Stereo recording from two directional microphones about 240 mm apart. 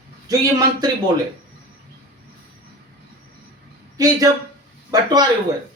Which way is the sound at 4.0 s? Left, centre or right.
Centre.